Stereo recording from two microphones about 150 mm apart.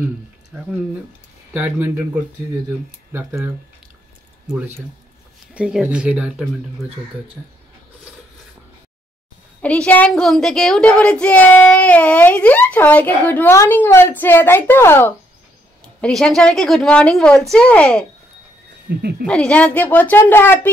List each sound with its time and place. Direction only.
1.5 s speech: 10° right (ahead or behind)
3.1 s speech: 15° right (ahead or behind)
4.6 s speech: 15° right (ahead or behind)
9.6 s a woman's voice: 10° left (ahead or behind)
16.0 s a woman's voice: 5° left (ahead or behind)
18.9 s speech: 90° right
19.2 s a woman's voice: 5° left (ahead or behind)